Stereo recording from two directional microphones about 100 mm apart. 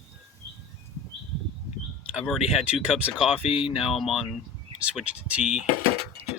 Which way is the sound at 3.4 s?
70° left (ahead or behind).